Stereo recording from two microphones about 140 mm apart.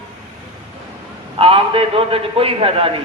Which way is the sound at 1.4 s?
40° right (ahead or behind).